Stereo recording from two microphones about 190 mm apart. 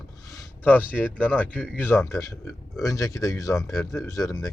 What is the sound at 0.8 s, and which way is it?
Speech, 5° right (ahead or behind).